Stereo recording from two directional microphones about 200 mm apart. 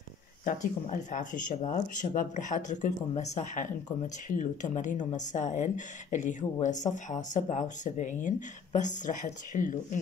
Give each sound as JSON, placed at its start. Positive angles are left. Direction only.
{"t": 0.5, "sound": "a woman's voice", "side_deg": 40}